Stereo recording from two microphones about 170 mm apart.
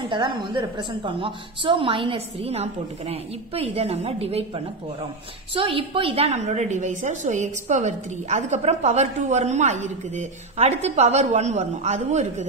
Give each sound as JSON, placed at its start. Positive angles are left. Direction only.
{"t": 0.1, "sound": "a woman's voice", "side_deg": -30}
{"t": 5.5, "sound": "a woman's voice", "side_deg": -30}